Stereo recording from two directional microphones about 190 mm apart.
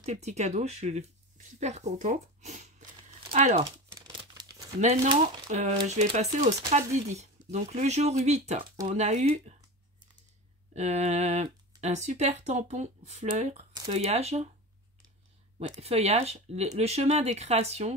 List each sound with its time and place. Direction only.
0.0 s speech: 35° right (ahead or behind)
3.9 s crumpling: 20° right (ahead or behind)
4.7 s speech: 35° right (ahead or behind)
10.7 s speech: 35° right (ahead or behind)
15.8 s speech: 35° right (ahead or behind)